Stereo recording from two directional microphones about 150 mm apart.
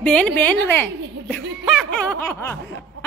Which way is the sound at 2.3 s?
15° left (ahead or behind).